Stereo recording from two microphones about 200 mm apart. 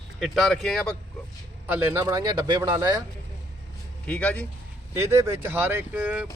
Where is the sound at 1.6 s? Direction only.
10° right (ahead or behind).